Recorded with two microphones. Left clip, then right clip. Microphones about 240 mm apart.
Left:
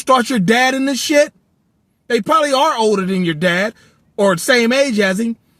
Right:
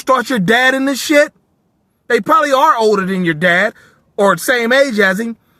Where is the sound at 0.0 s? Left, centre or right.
Right.